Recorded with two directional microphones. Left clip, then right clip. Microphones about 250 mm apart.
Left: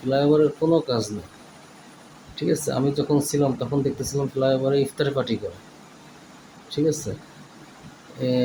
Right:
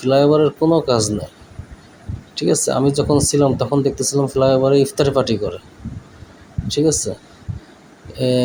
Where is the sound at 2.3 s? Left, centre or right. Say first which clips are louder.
Right 7 dB; right.